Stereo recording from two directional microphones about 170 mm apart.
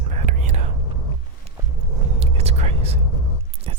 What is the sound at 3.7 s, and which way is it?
Boat, 30° right (ahead or behind).